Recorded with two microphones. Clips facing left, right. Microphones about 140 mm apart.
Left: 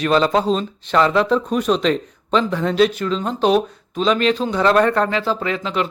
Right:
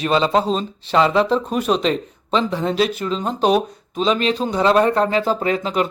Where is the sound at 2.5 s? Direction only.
30° right (ahead or behind).